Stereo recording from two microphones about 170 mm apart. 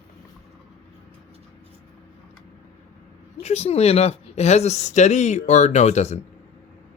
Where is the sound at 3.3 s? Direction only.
40° left (ahead or behind).